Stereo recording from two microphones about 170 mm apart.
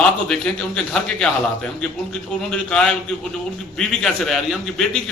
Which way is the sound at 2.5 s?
5° left (ahead or behind).